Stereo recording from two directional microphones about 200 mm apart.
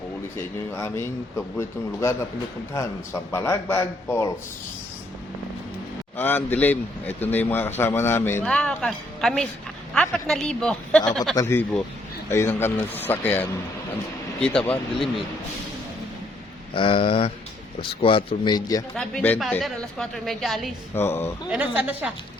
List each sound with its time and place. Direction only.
0.3 s speech: 10° left (ahead or behind)
6.1 s a woman's voice: 10° left (ahead or behind)
16.7 s speech: 25° left (ahead or behind)
18.9 s a woman's voice: 5° left (ahead or behind)
20.9 s speech: 10° left (ahead or behind)
21.5 s a woman's voice: 5° right (ahead or behind)